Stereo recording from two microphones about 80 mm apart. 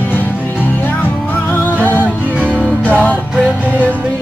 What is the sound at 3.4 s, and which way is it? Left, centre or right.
Music, centre.